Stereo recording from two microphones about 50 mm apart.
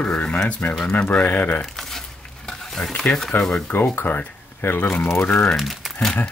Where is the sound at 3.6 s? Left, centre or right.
Left.